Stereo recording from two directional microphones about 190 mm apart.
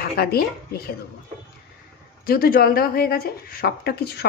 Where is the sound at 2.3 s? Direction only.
50° left (ahead or behind).